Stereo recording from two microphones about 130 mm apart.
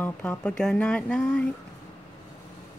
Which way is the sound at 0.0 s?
10° left (ahead or behind).